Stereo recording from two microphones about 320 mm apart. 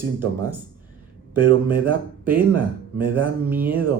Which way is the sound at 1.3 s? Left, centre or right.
Centre.